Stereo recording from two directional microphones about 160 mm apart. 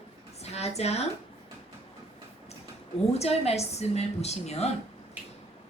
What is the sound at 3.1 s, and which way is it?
A woman's voice, 40° left (ahead or behind).